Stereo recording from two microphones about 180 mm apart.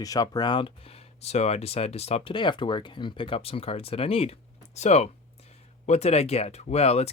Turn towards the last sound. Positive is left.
turn(degrees=35)  # may be behind; listen again after turning